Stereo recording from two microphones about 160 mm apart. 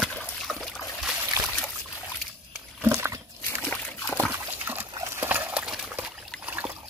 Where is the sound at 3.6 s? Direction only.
10° left (ahead or behind).